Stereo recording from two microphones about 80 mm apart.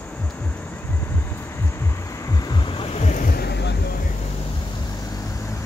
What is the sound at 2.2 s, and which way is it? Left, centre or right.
Vehicle, left.